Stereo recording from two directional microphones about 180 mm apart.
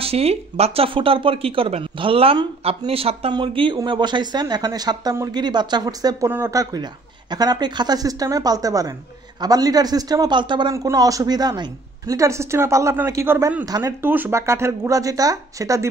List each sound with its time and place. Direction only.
0.0 s speech: 35° right (ahead or behind); by 15.9 s 20° right (ahead or behind)